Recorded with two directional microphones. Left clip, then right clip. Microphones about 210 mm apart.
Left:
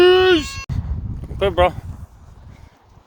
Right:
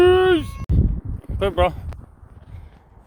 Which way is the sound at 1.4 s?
25° left (ahead or behind).